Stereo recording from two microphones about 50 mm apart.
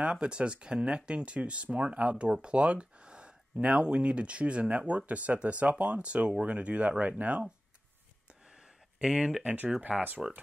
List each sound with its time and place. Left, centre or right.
0.0 s speech: right
9.0 s speech: centre
9.4 s speech: right